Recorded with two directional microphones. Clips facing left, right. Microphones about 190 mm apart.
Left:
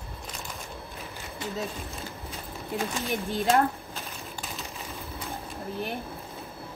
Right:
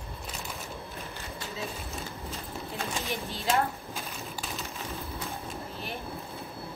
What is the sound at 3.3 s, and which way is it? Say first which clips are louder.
Speech: left 5 dB; 55° left (ahead or behind).